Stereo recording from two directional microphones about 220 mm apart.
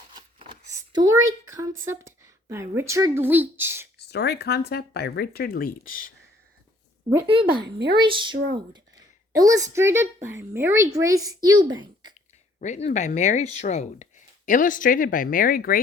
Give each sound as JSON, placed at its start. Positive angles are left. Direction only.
{"t": 0.1, "sound": "a sound", "side_deg": -20}
{"t": 3.9, "sound": "speech", "side_deg": 50}
{"t": 7.3, "sound": "speech", "side_deg": -25}
{"t": 7.6, "sound": "speech", "side_deg": -50}
{"t": 7.9, "sound": "a woman's voice", "side_deg": -20}
{"t": 12.5, "sound": "speech", "side_deg": 30}